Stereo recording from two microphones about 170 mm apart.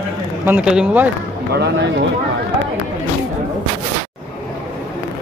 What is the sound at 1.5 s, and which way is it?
Speech, 75° right (ahead or behind).